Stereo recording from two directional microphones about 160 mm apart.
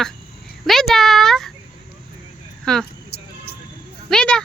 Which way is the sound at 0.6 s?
Centre (ahead or behind).